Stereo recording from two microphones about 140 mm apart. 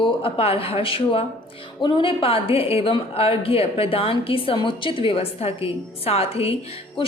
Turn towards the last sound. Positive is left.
turn(degrees=45)  # may be behind; listen again after turning